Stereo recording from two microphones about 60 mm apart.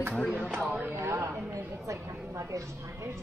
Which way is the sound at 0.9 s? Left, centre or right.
Right.